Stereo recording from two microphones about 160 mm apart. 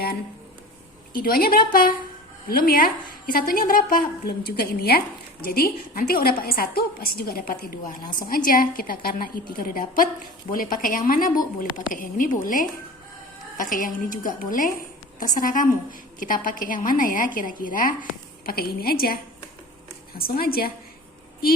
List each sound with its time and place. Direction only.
1.1 s a woman's voice: 65° left (ahead or behind)
18.4 s a woman's voice: 75° left (ahead or behind)